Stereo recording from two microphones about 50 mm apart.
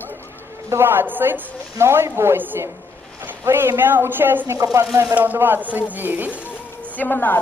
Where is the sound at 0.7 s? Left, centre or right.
Right.